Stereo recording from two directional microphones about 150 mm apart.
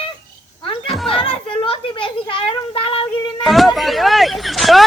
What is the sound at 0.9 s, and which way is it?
Children playing, 5° left (ahead or behind).